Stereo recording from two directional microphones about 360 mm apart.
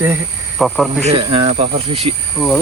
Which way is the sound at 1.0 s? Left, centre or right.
Centre.